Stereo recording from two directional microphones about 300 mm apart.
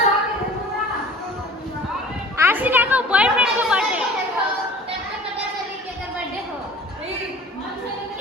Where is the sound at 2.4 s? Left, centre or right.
Centre.